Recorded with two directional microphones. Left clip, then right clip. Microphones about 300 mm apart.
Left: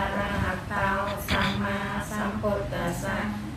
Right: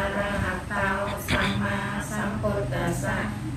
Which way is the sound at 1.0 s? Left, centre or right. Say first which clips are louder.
Right 1 dB; centre.